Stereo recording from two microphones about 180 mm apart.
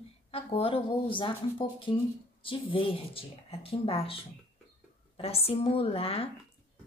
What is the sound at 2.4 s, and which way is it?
Speech, 30° left (ahead or behind).